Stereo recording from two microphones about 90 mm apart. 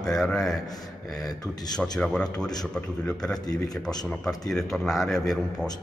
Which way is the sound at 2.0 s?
10° left (ahead or behind).